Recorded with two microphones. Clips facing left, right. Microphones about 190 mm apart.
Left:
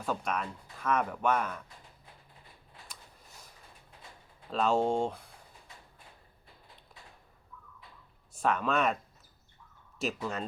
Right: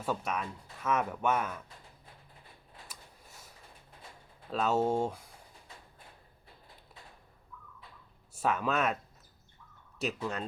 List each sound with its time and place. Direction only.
0.3 s speech: 5° right (ahead or behind)
4.5 s speech: 5° right (ahead or behind)
8.4 s speech: 5° right (ahead or behind)
10.0 s speech: centre (ahead or behind)